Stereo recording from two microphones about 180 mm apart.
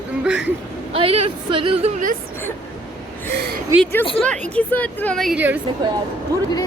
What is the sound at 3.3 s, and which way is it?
Speech, 60° right (ahead or behind).